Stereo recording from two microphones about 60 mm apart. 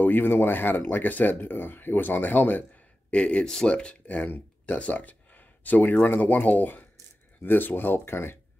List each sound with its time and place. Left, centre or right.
0.0 s speech: left